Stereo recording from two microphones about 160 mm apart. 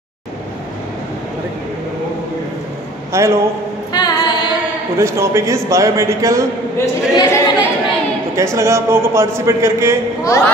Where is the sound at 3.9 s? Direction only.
25° left (ahead or behind).